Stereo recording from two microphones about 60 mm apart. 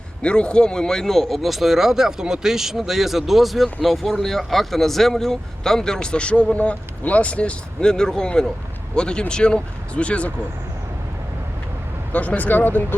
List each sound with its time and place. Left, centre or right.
0.2 s speech: centre
12.1 s speech: left